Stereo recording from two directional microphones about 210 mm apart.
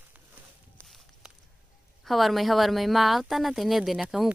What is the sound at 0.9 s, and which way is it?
Walk, centre (ahead or behind).